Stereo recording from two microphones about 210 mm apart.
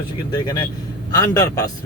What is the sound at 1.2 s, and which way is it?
Speech, 15° left (ahead or behind).